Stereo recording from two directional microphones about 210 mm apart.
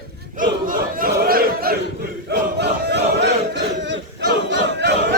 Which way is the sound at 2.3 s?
55° right (ahead or behind).